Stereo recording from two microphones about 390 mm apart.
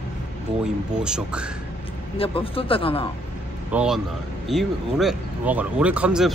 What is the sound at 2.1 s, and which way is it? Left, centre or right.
Speech, centre.